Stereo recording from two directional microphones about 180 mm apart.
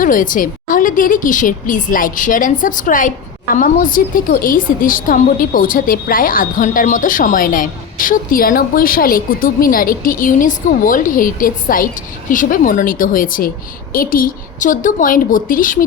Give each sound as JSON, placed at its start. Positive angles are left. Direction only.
{"t": 0.0, "sound": "a woman's voice", "side_deg": 50}